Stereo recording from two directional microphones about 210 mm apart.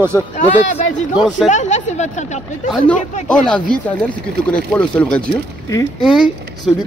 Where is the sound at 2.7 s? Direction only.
5° left (ahead or behind).